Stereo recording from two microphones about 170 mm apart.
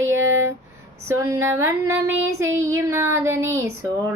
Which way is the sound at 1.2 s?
15° right (ahead or behind).